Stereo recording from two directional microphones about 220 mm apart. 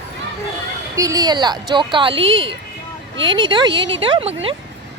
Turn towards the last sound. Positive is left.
turn(degrees=-25)  # may be behind; listen again after turning